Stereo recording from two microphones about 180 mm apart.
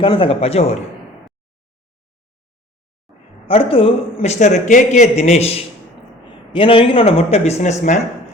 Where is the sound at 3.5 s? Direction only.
30° left (ahead or behind).